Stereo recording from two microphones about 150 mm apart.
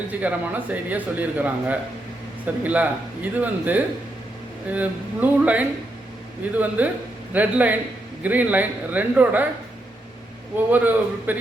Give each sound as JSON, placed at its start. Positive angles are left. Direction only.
{"t": 0.1, "sound": "speech", "side_deg": -10}
{"t": 10.7, "sound": "speech", "side_deg": -10}